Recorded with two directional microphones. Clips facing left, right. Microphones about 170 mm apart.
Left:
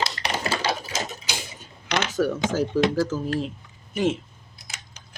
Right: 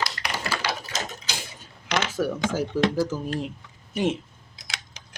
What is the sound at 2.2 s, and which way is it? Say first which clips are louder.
Speech: left 5 dB; 5° right (ahead or behind).